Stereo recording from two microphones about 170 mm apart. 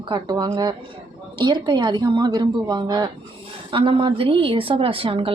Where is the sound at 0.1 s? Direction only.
25° right (ahead or behind).